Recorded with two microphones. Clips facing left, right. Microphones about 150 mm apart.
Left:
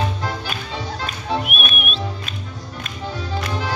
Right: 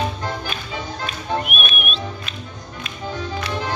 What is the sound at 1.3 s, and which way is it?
Music, centre (ahead or behind).